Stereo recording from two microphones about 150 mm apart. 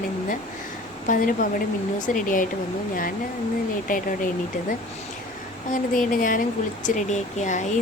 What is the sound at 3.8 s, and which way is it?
Speech, 65° left (ahead or behind).